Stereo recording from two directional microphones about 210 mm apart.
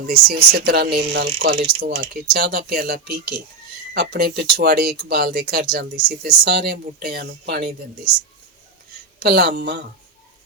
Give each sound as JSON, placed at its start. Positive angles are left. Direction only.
{"t": 0.0, "sound": "speech", "side_deg": -45}
{"t": 9.2, "sound": "speech", "side_deg": -50}